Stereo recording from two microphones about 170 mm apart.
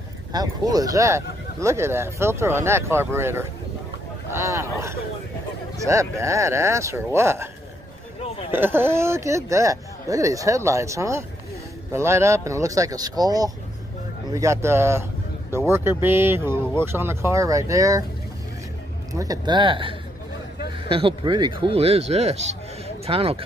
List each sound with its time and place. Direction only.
0.3 s speech: 25° right (ahead or behind)
4.3 s a sound: 15° right (ahead or behind)
5.9 s speech: 20° right (ahead or behind)
8.5 s speech: 15° right (ahead or behind)
19.1 s speech: 20° right (ahead or behind)